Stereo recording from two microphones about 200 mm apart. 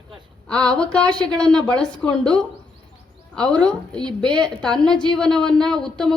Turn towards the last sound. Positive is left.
turn(degrees=5)  # may be behind; listen again after turning